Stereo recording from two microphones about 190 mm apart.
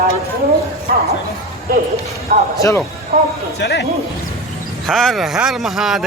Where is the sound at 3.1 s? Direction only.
35° right (ahead or behind).